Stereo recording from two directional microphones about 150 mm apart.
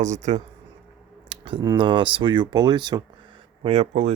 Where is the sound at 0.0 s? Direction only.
50° right (ahead or behind).